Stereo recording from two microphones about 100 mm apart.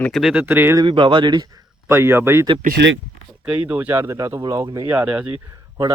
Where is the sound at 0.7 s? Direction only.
50° right (ahead or behind).